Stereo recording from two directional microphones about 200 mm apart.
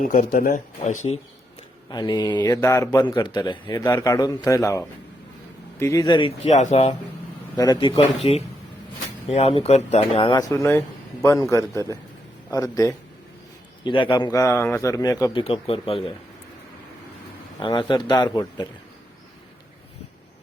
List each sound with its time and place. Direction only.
0.0 s speech: 40° left (ahead or behind)
1.9 s a man's voice: 20° left (ahead or behind)
7.5 s a man's voice: 20° left (ahead or behind)
10.5 s a man's voice: 10° left (ahead or behind); by 16.1 s 25° left (ahead or behind)
17.6 s a man's voice: 25° left (ahead or behind)